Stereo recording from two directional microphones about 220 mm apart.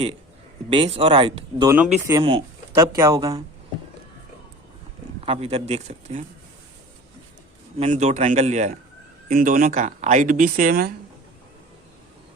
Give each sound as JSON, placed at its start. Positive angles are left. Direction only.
{"t": 0.7, "sound": "speech", "side_deg": -25}
{"t": 5.2, "sound": "speech", "side_deg": -25}
{"t": 7.8, "sound": "speech", "side_deg": -30}